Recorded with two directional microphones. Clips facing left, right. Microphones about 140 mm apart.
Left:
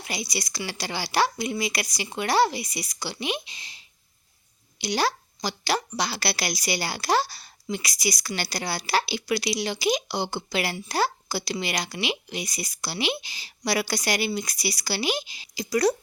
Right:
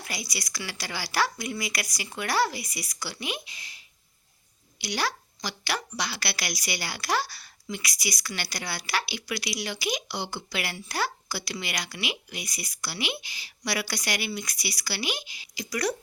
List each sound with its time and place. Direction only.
0.0 s speech: 25° left (ahead or behind)